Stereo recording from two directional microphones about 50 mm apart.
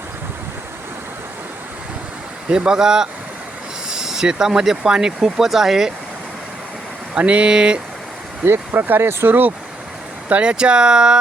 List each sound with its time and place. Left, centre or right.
2.5 s speech: centre
7.1 s speech: right
9.0 s speech: right
10.2 s speech: right